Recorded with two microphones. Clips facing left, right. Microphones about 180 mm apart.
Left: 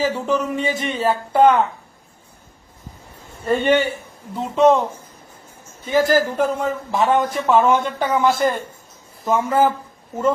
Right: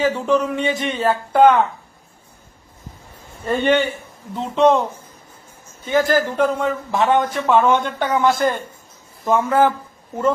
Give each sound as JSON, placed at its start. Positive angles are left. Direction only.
{"t": 0.0, "sound": "a man's voice", "side_deg": 5}
{"t": 3.6, "sound": "a man's voice", "side_deg": 10}
{"t": 5.8, "sound": "a man's voice", "side_deg": 0}